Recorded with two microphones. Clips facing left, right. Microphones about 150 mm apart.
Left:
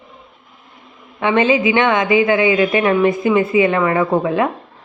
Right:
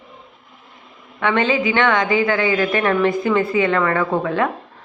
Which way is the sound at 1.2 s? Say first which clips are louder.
Left 4 dB; 20° left (ahead or behind).